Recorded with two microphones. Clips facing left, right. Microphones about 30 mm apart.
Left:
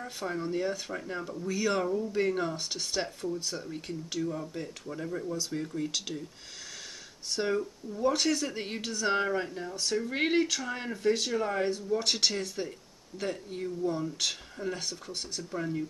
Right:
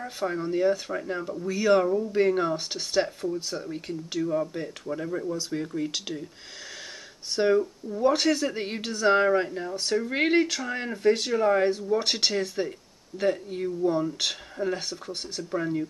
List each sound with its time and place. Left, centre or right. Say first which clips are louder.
0.0 s speech: right 5 dB; centre
7.3 s speech: right 8 dB; centre